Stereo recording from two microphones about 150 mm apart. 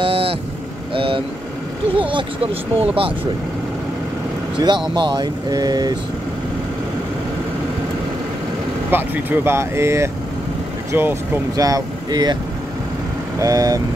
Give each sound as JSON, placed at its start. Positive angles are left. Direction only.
{"t": 0.0, "sound": "vehicle", "side_deg": -40}
{"t": 0.9, "sound": "speech", "side_deg": -35}
{"t": 4.6, "sound": "speech", "side_deg": -30}
{"t": 8.9, "sound": "speech", "side_deg": -15}
{"t": 13.4, "sound": "speech", "side_deg": -25}